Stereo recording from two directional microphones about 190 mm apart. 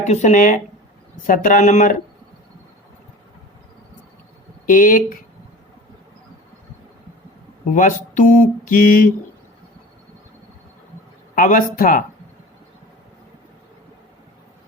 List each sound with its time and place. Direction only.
0.1 s speech: 40° left (ahead or behind)
4.6 s speech: 45° left (ahead or behind)
7.7 s speech: 40° left (ahead or behind)
11.3 s speech: 45° left (ahead or behind)